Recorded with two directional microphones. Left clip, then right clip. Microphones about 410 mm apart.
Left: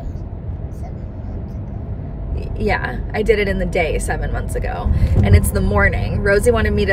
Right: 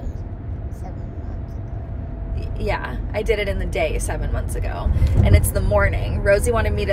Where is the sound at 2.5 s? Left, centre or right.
Centre.